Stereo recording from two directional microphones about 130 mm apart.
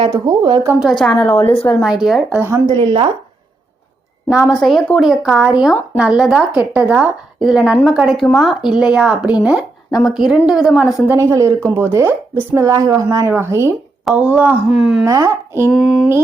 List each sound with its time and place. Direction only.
0.1 s a woman's voice: 35° right (ahead or behind)
0.8 s a woman's voice: centre (ahead or behind); by 1.5 s 20° left (ahead or behind)
1.8 s speech: 5° right (ahead or behind)
2.6 s a woman's voice: 40° right (ahead or behind)
4.3 s a woman's voice: 5° right (ahead or behind)
11.0 s a woman's voice: 15° right (ahead or behind)
15.0 s a woman's voice: 25° right (ahead or behind)
15.7 s speech: 5° right (ahead or behind)